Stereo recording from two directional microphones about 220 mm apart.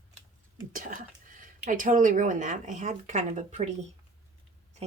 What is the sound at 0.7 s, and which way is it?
Speech, 40° right (ahead or behind).